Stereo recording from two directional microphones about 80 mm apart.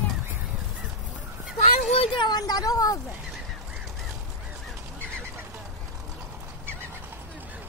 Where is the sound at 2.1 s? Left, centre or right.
Left.